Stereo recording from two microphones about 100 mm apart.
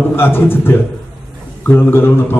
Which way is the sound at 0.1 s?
25° left (ahead or behind).